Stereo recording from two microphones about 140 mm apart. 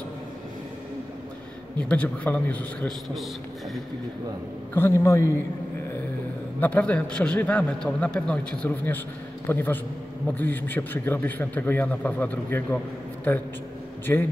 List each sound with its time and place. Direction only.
1.8 s a man's voice: 10° left (ahead or behind)
4.7 s a man's voice: 20° left (ahead or behind)
6.6 s a man's voice: 10° left (ahead or behind)
14.1 s a man's voice: 15° left (ahead or behind)